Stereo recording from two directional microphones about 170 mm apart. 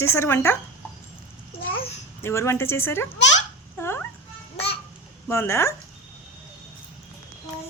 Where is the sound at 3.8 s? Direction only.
15° left (ahead or behind).